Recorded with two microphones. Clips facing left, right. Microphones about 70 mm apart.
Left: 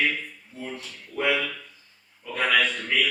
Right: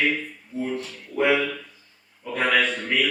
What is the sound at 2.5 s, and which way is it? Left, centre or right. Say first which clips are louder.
Speech: right 1 dB; right.